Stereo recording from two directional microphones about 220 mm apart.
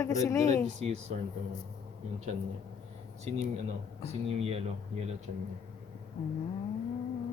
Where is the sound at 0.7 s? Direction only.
30° right (ahead or behind).